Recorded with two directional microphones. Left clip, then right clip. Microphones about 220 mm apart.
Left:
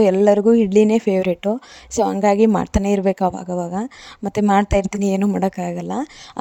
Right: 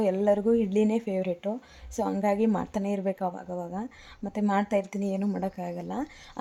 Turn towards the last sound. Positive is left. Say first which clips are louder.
# left 9 dB
turn(degrees=45)  # may be behind; listen again after turning